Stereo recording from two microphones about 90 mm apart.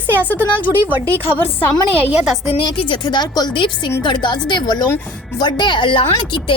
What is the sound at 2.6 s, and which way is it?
A woman's voice, 70° left (ahead or behind).